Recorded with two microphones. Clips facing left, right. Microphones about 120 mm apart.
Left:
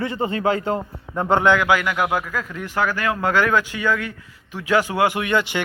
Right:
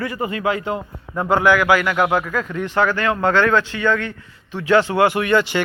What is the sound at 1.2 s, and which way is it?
Speech, 25° left (ahead or behind).